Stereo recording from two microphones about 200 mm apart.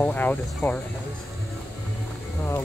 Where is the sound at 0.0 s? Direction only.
10° left (ahead or behind).